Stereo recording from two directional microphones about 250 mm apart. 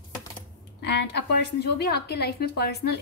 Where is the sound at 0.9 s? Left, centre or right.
Left.